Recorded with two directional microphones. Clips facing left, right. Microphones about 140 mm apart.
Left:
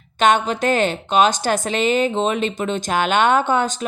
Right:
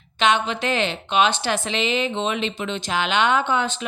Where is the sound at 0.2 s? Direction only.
45° left (ahead or behind).